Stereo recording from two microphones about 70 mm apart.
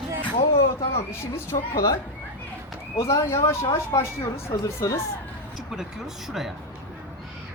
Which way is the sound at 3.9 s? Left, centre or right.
Left.